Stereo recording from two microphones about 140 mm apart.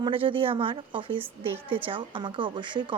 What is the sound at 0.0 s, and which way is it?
Speech, 40° right (ahead or behind).